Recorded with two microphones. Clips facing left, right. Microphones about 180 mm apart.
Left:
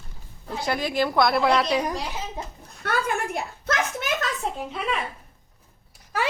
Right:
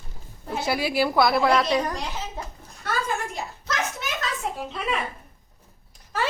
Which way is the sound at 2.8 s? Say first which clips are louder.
Left 2 dB; 60° left (ahead or behind).